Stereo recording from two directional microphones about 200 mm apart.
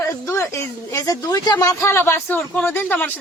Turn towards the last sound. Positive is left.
turn(degrees=10)  # may be behind; listen again after turning